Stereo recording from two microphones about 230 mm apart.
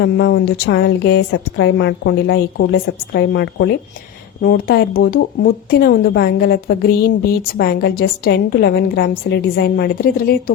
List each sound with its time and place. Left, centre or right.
0.0 s speech: left